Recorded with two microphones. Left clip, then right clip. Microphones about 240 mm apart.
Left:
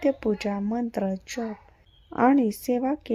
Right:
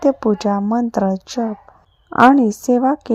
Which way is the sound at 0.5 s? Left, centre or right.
Centre.